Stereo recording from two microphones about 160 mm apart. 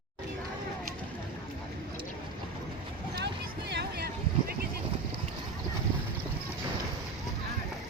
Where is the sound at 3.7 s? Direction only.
90° right.